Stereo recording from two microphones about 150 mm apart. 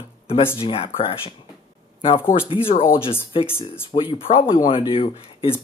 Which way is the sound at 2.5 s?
35° left (ahead or behind).